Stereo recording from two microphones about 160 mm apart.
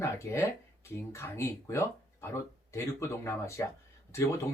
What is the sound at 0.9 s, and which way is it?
Speech, 15° left (ahead or behind).